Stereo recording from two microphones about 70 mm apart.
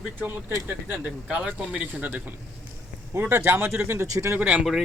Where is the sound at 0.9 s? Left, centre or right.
Right.